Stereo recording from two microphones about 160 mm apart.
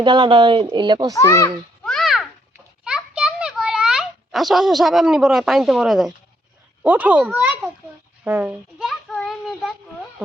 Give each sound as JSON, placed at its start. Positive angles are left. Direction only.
{"t": 0.0, "sound": "speech", "side_deg": -30}
{"t": 1.1, "sound": "a child's voice", "side_deg": 20}
{"t": 1.8, "sound": "babbling", "side_deg": 5}
{"t": 2.8, "sound": "a sound", "side_deg": -5}
{"t": 6.8, "sound": "a child's voice", "side_deg": -10}
{"t": 8.2, "sound": "a sound", "side_deg": -10}
{"t": 9.1, "sound": "child singing", "side_deg": 0}